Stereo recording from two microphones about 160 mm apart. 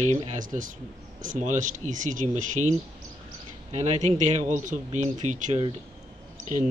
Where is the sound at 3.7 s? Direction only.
45° right (ahead or behind).